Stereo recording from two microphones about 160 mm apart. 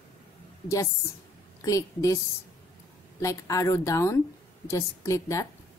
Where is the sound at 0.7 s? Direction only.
20° left (ahead or behind).